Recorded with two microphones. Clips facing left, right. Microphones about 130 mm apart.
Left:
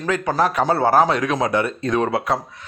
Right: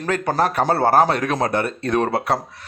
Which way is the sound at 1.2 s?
35° right (ahead or behind).